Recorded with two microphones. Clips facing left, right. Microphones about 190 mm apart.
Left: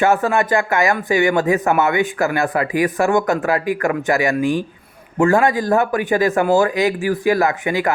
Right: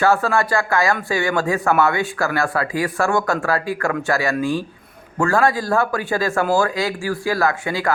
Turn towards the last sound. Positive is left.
turn(degrees=20)  # may be behind; listen again after turning